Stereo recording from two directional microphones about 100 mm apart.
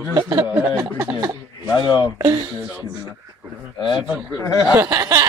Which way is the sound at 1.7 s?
40° left (ahead or behind).